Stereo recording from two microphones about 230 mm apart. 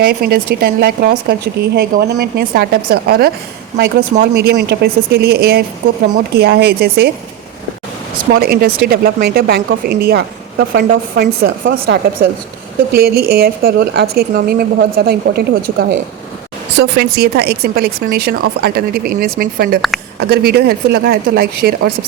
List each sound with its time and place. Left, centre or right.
0.1 s a woman's voice: right
8.4 s a woman's voice: right
16.7 s a woman's voice: right